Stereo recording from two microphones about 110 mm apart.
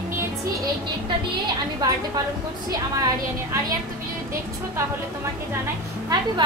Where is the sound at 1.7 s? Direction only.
35° right (ahead or behind).